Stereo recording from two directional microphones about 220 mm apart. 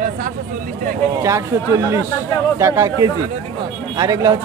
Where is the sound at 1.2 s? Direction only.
15° right (ahead or behind).